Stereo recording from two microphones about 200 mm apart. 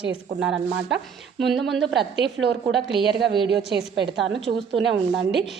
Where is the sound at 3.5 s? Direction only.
55° right (ahead or behind).